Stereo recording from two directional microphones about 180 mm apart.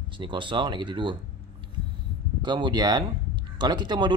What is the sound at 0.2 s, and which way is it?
Speech, 25° right (ahead or behind).